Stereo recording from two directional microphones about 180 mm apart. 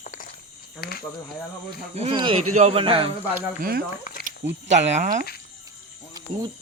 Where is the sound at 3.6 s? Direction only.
55° right (ahead or behind).